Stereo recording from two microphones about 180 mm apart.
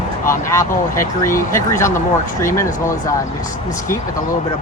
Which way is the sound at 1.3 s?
50° left (ahead or behind).